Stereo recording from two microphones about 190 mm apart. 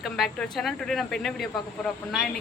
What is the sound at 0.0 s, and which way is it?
Speech, centre (ahead or behind).